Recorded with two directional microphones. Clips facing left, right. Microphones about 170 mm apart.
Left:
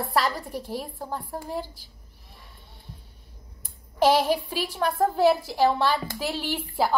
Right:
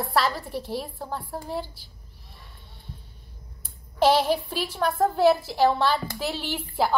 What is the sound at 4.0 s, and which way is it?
A woman's voice, 5° left (ahead or behind).